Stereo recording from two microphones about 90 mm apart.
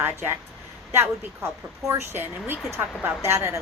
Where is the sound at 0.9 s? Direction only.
25° right (ahead or behind).